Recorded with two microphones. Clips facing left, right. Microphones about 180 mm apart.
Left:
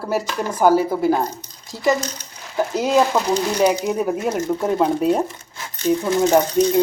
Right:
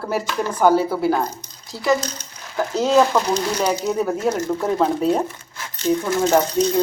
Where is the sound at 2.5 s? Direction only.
10° left (ahead or behind).